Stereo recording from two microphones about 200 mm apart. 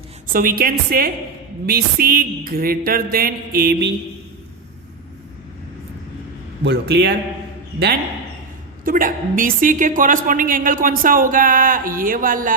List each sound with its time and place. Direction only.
0.3 s a woman's voice: 45° right (ahead or behind)
6.7 s a man's voice: 55° right (ahead or behind)
8.8 s a woman's voice: 45° right (ahead or behind)